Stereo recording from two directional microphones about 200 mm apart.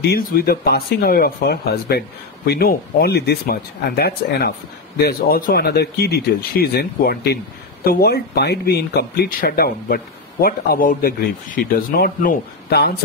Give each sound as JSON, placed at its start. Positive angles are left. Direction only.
{"t": 0.0, "sound": "speech", "side_deg": 50}